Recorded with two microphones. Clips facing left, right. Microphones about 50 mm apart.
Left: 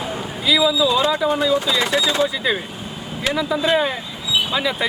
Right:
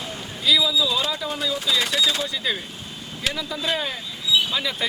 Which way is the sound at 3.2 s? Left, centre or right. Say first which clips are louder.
Left 7 dB; centre.